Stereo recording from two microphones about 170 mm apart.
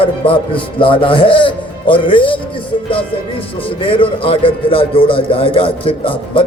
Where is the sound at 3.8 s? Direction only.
30° left (ahead or behind).